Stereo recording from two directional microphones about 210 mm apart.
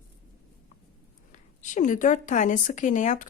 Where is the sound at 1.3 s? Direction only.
35° left (ahead or behind).